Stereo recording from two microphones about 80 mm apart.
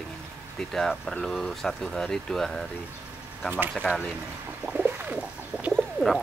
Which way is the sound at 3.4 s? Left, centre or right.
Right.